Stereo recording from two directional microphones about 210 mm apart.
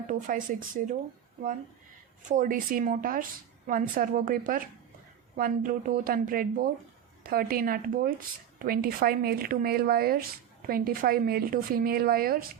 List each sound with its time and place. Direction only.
0.1 s speech: 40° right (ahead or behind)
2.2 s a woman's voice: 35° right (ahead or behind)